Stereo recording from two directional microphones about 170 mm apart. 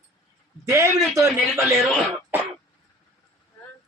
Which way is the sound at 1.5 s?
Centre (ahead or behind).